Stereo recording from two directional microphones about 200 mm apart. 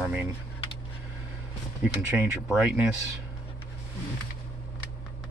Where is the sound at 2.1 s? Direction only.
5° right (ahead or behind).